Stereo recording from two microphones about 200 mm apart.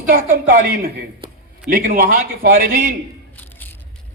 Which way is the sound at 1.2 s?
25° right (ahead or behind).